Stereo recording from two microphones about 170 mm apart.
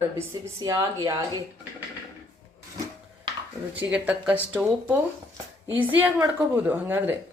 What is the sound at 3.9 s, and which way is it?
A woman's voice, 10° right (ahead or behind).